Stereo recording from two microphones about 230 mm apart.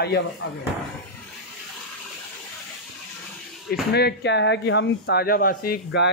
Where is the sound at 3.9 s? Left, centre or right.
Left.